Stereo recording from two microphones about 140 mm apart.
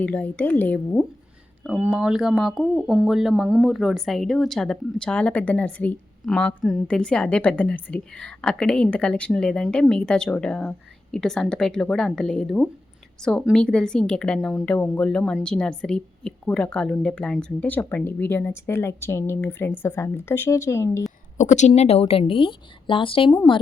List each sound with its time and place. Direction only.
0.0 s a woman's voice: 10° left (ahead or behind)
1.6 s a woman's voice: 5° right (ahead or behind); by 21.0 s 20° left (ahead or behind)
21.3 s speech: 60° left (ahead or behind)
21.8 s a woman's voice: 45° left (ahead or behind)